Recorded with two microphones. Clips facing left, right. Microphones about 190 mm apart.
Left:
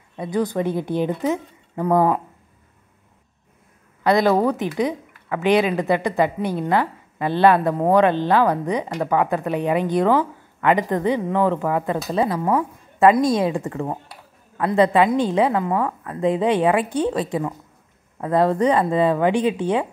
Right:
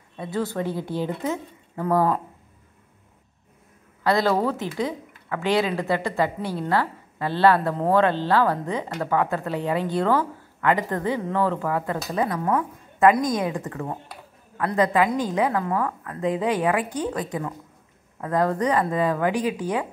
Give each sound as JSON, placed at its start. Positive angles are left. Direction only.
{"t": 0.2, "sound": "a woman's voice", "side_deg": 15}
{"t": 4.0, "sound": "a woman's voice", "side_deg": 20}